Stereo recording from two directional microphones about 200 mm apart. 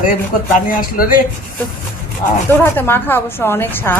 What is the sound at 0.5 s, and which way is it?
Speech, 45° left (ahead or behind).